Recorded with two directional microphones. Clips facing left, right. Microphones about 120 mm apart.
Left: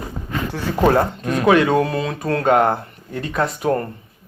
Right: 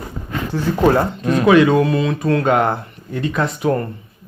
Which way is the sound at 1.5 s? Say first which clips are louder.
Right 3 dB; 45° left (ahead or behind).